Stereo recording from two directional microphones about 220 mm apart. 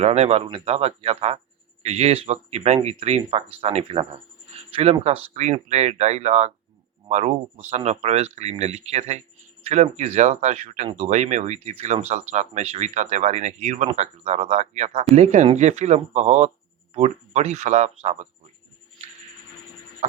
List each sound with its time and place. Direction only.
0.0 s speech: 30° right (ahead or behind)